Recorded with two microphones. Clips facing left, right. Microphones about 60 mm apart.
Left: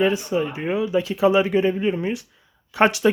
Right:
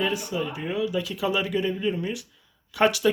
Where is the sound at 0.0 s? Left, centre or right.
Left.